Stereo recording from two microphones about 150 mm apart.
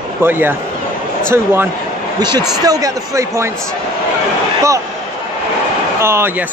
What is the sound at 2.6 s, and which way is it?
Speech, 25° right (ahead or behind).